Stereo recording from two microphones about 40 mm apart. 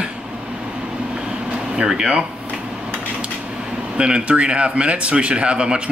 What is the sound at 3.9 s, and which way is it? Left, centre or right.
A man's voice, right.